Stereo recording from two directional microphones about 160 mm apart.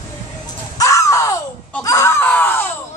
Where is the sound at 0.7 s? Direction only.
20° left (ahead or behind).